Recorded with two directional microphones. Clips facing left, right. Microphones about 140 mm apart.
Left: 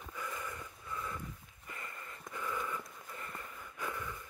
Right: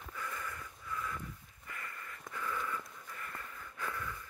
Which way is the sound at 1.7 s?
25° left (ahead or behind).